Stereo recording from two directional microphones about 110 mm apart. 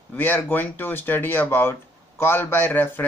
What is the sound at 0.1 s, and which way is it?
Speech, 15° left (ahead or behind).